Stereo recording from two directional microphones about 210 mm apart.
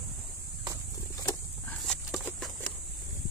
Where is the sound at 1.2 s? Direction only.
15° left (ahead or behind).